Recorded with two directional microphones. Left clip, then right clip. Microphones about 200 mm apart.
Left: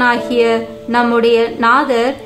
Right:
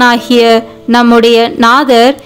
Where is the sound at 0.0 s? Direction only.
45° right (ahead or behind).